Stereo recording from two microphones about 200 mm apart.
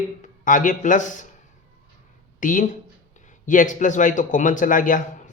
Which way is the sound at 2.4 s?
40° left (ahead or behind).